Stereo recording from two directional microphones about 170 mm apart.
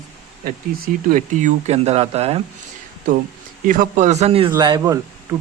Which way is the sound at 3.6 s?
50° right (ahead or behind).